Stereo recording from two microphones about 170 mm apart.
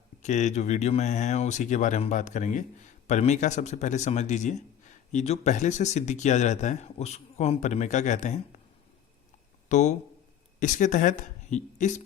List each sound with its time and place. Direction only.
0.2 s speech: 45° left (ahead or behind)
9.6 s speech: 45° left (ahead or behind)